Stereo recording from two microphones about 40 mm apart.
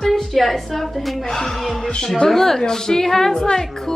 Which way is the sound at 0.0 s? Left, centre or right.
Centre.